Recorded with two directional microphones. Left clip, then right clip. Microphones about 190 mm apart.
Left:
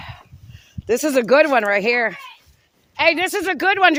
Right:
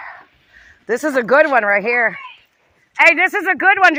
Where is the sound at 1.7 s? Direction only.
60° left (ahead or behind).